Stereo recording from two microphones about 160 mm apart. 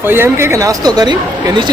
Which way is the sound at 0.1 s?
15° right (ahead or behind).